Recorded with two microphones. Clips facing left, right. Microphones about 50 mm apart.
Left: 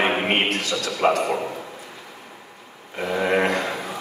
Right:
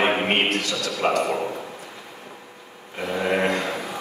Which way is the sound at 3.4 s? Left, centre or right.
Left.